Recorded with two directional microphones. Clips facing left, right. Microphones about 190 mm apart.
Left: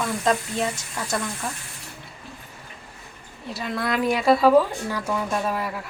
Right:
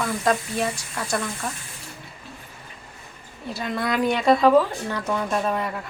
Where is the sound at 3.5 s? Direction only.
Centre (ahead or behind).